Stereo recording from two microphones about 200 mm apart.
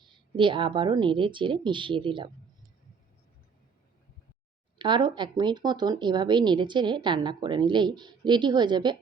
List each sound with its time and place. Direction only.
0.3 s speech: 25° right (ahead or behind)
4.8 s speech: 25° right (ahead or behind)